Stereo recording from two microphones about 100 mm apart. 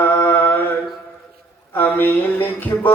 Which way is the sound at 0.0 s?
25° left (ahead or behind).